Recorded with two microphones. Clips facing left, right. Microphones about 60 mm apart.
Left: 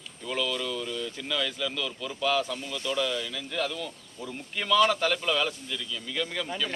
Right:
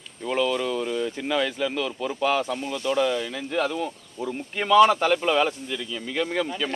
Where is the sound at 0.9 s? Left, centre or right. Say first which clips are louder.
Right 7 dB; right.